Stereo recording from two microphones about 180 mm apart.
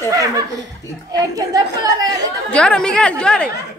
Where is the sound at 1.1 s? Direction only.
20° right (ahead or behind).